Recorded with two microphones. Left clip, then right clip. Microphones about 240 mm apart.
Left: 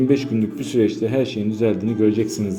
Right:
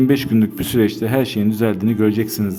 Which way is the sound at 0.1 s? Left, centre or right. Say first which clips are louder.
Right 2 dB; right.